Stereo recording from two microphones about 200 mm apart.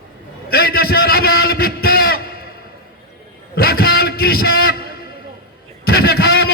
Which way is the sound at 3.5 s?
50° left (ahead or behind).